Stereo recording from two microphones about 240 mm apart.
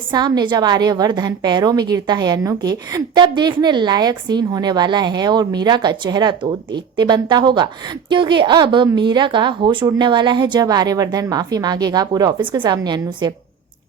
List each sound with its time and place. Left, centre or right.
0.1 s a woman's voice: centre